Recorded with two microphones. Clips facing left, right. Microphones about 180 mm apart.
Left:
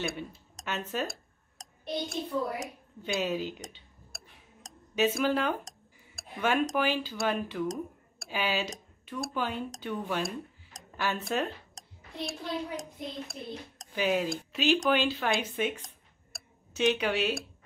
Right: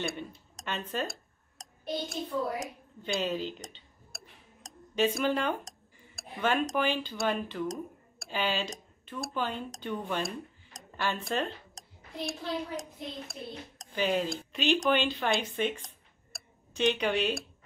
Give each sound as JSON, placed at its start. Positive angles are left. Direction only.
{"t": 0.0, "sound": "speech", "side_deg": 0}
{"t": 0.9, "sound": "a sound", "side_deg": 0}
{"t": 2.6, "sound": "speech", "side_deg": 5}